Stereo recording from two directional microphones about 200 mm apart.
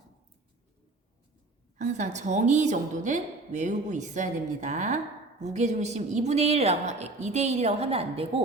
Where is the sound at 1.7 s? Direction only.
35° right (ahead or behind).